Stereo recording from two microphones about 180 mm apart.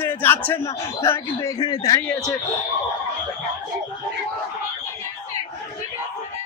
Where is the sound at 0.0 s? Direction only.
10° left (ahead or behind).